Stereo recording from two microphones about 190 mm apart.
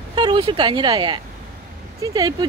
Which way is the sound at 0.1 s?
20° right (ahead or behind).